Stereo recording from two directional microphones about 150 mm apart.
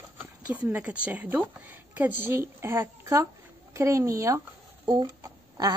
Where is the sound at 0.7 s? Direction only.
10° right (ahead or behind).